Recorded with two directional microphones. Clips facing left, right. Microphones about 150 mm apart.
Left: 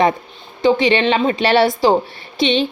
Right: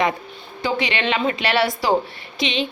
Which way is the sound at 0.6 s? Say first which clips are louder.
Left 8 dB; 30° left (ahead or behind).